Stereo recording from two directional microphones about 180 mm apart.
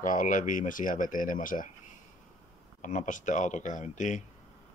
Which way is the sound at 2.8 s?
45° left (ahead or behind).